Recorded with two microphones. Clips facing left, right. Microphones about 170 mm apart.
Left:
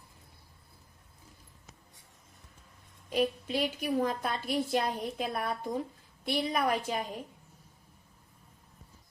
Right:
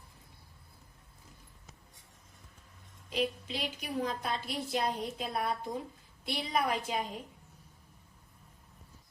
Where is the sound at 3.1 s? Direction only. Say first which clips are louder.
Left 4 dB; 50° left (ahead or behind).